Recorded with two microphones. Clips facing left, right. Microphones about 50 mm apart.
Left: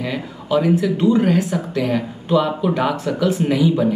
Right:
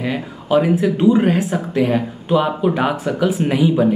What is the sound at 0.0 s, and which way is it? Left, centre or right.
Speech, centre.